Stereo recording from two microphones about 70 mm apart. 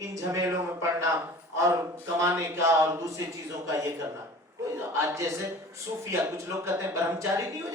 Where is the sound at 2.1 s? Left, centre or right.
Right.